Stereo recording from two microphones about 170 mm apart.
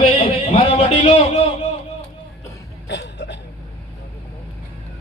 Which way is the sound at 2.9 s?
90° left.